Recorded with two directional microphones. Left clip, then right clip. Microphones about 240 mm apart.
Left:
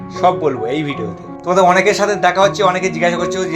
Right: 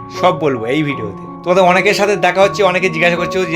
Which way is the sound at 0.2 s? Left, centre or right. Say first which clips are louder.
Right 1 dB; right.